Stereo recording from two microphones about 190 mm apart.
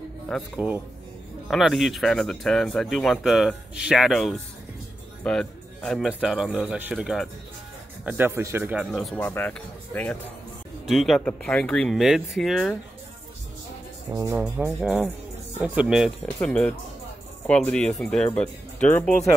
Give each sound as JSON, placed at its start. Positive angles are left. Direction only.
{"t": 0.3, "sound": "speech", "side_deg": -5}
{"t": 8.9, "sound": "speech", "side_deg": 5}
{"t": 14.1, "sound": "speech", "side_deg": -20}
{"t": 14.8, "sound": "speech", "side_deg": -5}